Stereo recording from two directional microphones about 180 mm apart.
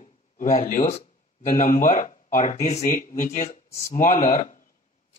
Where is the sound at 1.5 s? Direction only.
45° left (ahead or behind).